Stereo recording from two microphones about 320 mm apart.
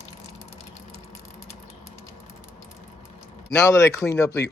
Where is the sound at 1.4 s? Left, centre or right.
Centre.